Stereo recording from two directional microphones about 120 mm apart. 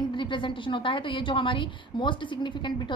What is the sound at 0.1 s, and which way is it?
A woman's voice, 45° left (ahead or behind).